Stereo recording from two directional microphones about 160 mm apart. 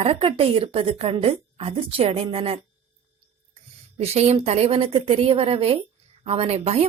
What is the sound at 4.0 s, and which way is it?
A woman's voice, 40° right (ahead or behind).